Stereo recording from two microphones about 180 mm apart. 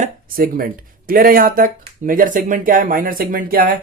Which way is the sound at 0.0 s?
50° right (ahead or behind).